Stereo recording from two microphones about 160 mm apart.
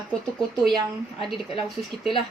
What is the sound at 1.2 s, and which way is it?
Speech, centre (ahead or behind).